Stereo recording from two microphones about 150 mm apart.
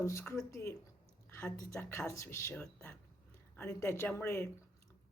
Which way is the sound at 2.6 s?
5° left (ahead or behind).